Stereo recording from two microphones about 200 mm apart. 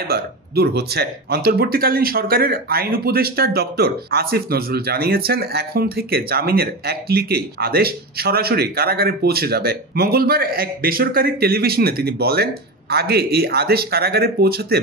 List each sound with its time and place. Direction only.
0.1 s speech: 55° right (ahead or behind)